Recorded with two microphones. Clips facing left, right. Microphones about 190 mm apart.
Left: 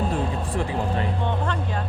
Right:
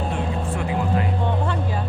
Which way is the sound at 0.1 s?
35° left (ahead or behind).